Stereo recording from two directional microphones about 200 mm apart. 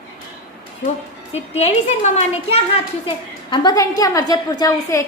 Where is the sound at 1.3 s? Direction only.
30° left (ahead or behind).